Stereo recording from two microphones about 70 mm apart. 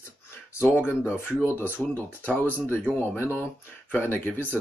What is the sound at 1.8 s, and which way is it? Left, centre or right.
Speech, centre.